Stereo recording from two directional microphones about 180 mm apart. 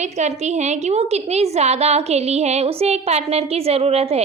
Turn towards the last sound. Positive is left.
turn(degrees=-35)  # may be behind; listen again after turning